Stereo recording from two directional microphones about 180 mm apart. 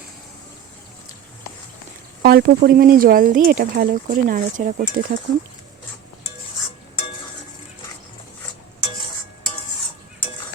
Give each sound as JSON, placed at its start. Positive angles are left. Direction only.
{"t": 2.2, "sound": "speech", "side_deg": -60}